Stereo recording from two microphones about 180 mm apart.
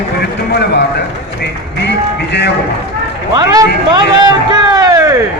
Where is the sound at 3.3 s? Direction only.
20° right (ahead or behind).